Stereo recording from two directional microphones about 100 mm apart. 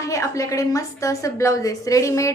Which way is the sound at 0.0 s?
30° left (ahead or behind).